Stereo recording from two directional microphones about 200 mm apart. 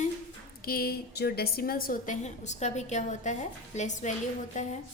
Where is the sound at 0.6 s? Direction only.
50° left (ahead or behind).